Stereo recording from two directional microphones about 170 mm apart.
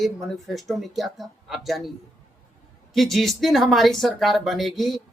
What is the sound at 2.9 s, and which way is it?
Speech, centre (ahead or behind).